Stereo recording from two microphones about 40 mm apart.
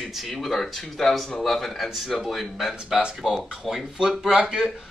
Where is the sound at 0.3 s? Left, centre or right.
Centre.